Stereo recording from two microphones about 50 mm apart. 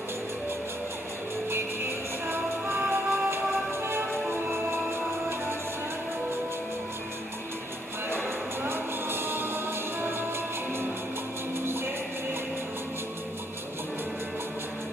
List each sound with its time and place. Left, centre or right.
2.2 s music: right
2.9 s music: right
8.1 s music: right
11.6 s music: right